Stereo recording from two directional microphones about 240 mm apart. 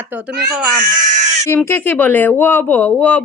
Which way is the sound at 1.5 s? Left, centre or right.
Centre.